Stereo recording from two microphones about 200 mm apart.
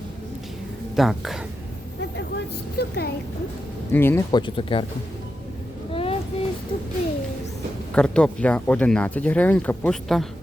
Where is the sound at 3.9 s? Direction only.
10° left (ahead or behind).